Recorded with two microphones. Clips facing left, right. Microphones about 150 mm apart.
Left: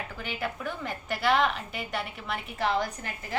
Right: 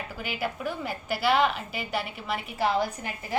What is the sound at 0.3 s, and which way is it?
A woman's voice, 5° right (ahead or behind).